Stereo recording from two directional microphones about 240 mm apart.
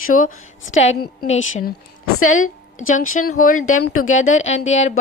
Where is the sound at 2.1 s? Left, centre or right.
Left.